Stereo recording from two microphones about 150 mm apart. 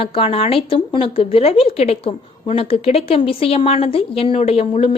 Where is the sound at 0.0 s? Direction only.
40° left (ahead or behind).